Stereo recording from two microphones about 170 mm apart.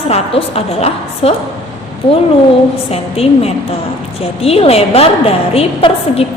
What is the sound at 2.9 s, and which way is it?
A woman's voice, 35° left (ahead or behind).